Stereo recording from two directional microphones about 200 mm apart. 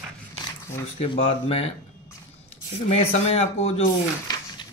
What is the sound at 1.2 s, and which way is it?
Speech, 30° left (ahead or behind).